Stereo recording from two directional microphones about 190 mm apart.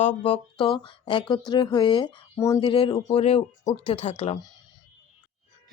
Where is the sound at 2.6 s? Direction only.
25° left (ahead or behind).